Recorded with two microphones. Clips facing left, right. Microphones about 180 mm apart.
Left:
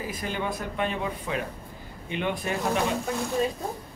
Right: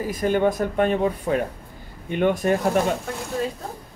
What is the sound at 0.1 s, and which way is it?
Speech, 50° right (ahead or behind).